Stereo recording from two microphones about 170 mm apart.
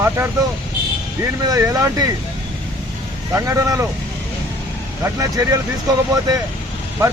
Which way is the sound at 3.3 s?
20° right (ahead or behind).